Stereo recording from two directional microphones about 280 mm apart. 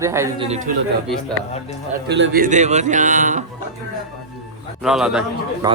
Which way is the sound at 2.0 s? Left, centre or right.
Right.